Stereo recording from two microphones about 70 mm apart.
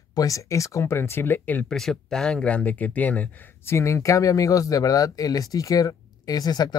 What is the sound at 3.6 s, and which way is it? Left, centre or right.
Speech, left.